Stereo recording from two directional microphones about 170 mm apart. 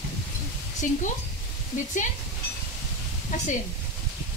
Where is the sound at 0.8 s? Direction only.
50° left (ahead or behind).